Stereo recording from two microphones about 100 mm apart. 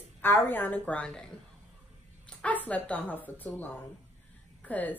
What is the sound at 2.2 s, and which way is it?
A woman's voice, 15° left (ahead or behind).